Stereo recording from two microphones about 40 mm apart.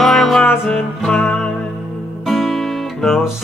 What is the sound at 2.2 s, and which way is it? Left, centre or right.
Music, centre.